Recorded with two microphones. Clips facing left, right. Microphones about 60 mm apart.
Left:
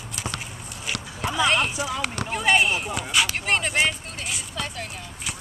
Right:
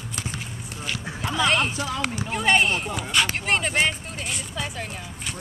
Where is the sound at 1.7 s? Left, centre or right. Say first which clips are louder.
Even; centre.